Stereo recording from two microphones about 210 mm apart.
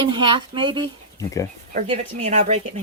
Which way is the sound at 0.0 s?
25° right (ahead or behind).